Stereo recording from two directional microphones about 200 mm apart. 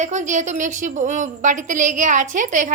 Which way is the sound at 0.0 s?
35° right (ahead or behind).